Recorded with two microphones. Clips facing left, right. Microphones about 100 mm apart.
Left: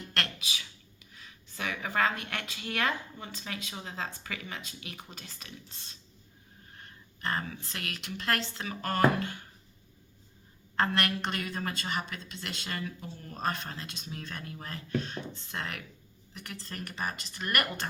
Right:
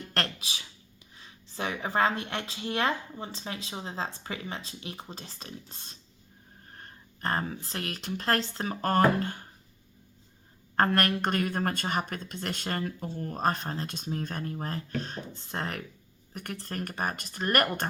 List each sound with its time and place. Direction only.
0.1 s a sound: 35° right (ahead or behind)
1.1 s speech: 30° right (ahead or behind)
5.7 s speech: 45° right (ahead or behind)
10.8 s speech: 45° right (ahead or behind)
16.3 s speech: 50° right (ahead or behind)